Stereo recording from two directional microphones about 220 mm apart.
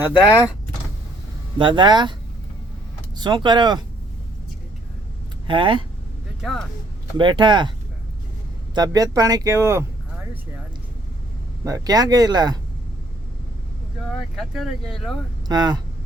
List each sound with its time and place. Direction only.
0.0 s speech: 10° right (ahead or behind)
1.5 s speech: 20° right (ahead or behind)
3.2 s speech: 20° right (ahead or behind)
5.5 s speech: 20° right (ahead or behind)
7.2 s speech: 20° right (ahead or behind)
8.7 s speech: 15° right (ahead or behind)
11.6 s speech: 15° right (ahead or behind)
14.3 s speech: centre (ahead or behind)
15.4 s speech: 20° right (ahead or behind)